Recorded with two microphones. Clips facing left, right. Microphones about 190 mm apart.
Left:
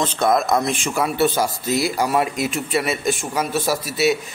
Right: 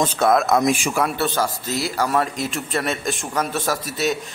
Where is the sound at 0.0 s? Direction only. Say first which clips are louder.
Right 1 dB; 5° right (ahead or behind).